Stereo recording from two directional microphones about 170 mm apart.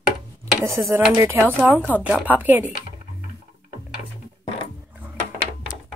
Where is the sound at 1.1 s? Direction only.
15° right (ahead or behind).